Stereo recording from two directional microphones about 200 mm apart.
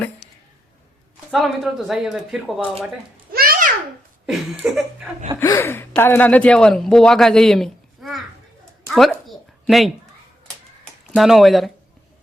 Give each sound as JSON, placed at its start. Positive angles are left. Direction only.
{"t": 1.3, "sound": "speech", "side_deg": 0}
{"t": 3.3, "sound": "a sound", "side_deg": -50}
{"t": 4.3, "sound": "speech", "side_deg": 0}
{"t": 5.4, "sound": "speech", "side_deg": 15}
{"t": 8.9, "sound": "a sound", "side_deg": 0}
{"t": 11.0, "sound": "speech", "side_deg": 0}